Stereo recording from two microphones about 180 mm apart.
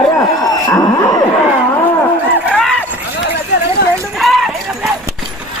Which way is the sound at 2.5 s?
5° left (ahead or behind).